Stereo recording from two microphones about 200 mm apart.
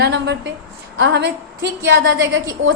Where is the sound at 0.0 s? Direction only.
60° right (ahead or behind).